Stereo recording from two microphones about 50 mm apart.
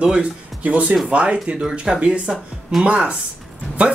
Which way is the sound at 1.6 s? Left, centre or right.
Centre.